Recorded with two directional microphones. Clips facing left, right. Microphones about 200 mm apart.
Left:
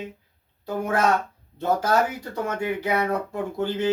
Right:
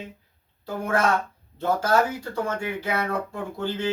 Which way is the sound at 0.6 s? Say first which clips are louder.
Left 1 dB; 20° left (ahead or behind).